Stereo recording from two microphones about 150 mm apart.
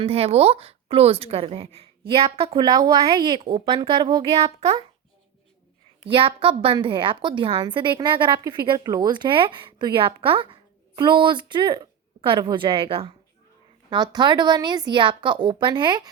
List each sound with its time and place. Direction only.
0.0 s a woman's voice: 40° right (ahead or behind)
2.6 s a woman's voice: 25° right (ahead or behind)
6.1 s a woman's voice: 35° right (ahead or behind)